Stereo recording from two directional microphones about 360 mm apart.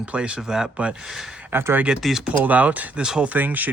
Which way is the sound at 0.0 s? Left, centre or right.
Centre.